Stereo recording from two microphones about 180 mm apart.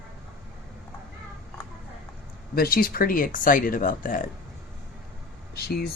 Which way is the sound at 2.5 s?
55° left (ahead or behind).